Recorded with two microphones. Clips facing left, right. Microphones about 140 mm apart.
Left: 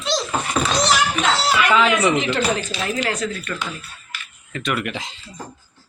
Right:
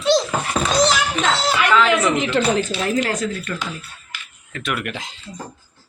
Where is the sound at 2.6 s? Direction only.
50° right (ahead or behind).